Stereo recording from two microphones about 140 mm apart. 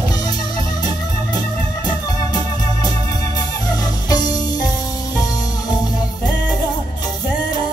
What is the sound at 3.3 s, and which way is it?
Music, 30° left (ahead or behind).